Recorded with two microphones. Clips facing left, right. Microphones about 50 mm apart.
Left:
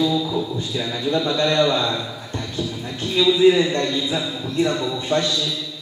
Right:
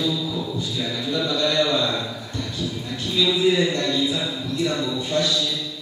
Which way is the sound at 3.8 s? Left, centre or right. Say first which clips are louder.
Even; centre.